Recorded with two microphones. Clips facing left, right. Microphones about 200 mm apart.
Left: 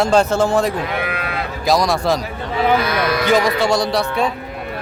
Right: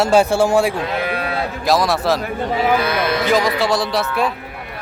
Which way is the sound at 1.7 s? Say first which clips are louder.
Left 1 dB; centre (ahead or behind).